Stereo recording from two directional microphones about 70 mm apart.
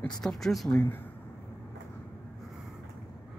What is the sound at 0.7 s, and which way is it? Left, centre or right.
Speech, left.